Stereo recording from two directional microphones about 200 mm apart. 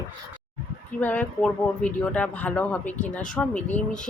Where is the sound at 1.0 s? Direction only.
5° left (ahead or behind).